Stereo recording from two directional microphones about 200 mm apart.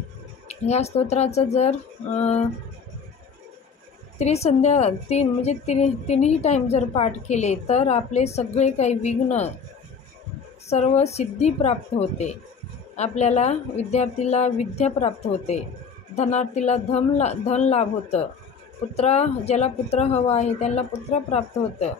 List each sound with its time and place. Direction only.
0.5 s a woman's voice: 30° left (ahead or behind)
4.2 s a woman's voice: 30° left (ahead or behind)
10.7 s a woman's voice: 35° left (ahead or behind)